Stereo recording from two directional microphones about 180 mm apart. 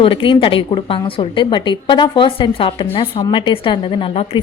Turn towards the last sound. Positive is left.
turn(degrees=30)  # may be behind; listen again after turning